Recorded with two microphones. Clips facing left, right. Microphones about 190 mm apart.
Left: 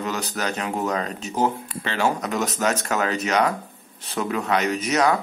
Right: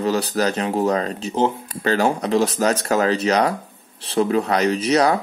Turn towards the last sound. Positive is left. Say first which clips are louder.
# right 4 dB
turn(degrees=-35)  # may be behind; listen again after turning